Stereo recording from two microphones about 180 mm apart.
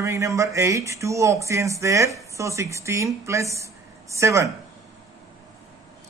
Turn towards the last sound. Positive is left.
turn(degrees=-15)  # may be behind; listen again after turning